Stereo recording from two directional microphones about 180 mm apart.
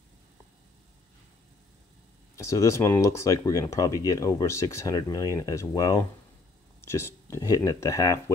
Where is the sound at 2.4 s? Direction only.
15° left (ahead or behind).